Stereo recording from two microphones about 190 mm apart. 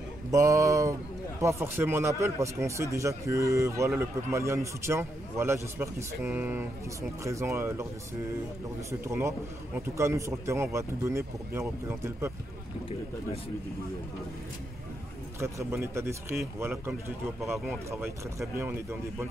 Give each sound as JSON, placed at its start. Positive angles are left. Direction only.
{"t": 0.3, "sound": "a man's voice", "side_deg": -15}
{"t": 9.0, "sound": "a man's voice", "side_deg": -15}
{"t": 15.4, "sound": "a man's voice", "side_deg": -15}
{"t": 18.6, "sound": "a man's voice", "side_deg": -15}